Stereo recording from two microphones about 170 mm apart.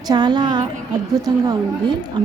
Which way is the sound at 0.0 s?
25° right (ahead or behind).